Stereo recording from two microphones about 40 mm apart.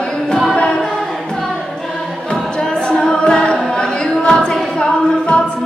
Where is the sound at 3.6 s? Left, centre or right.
Centre.